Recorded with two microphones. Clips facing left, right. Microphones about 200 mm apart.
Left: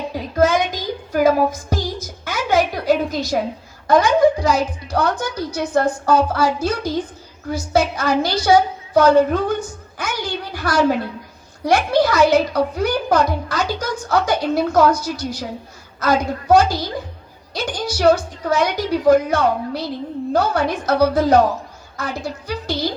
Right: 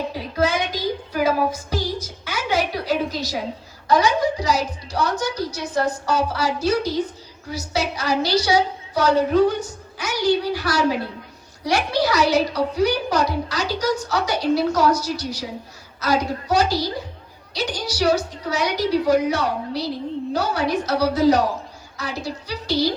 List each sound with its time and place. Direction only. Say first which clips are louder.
0.1 s child singing: left 10 dB; 45° left (ahead or behind)
3.8 s a child's voice: left 5 dB; 50° left (ahead or behind)